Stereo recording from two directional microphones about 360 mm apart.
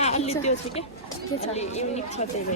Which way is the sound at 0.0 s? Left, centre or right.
Centre.